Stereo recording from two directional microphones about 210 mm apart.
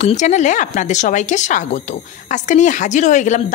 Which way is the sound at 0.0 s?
35° left (ahead or behind).